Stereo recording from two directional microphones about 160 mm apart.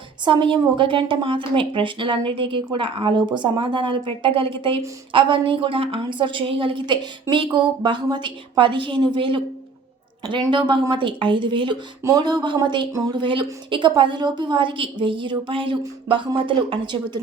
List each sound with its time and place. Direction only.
0.3 s a woman's voice: 30° right (ahead or behind)